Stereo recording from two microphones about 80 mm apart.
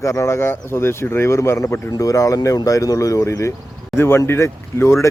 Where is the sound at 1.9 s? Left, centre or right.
Left.